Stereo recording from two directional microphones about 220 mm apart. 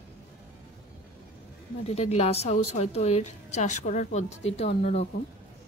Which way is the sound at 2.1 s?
30° left (ahead or behind).